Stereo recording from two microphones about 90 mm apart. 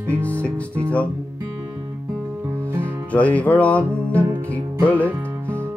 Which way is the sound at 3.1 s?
15° left (ahead or behind).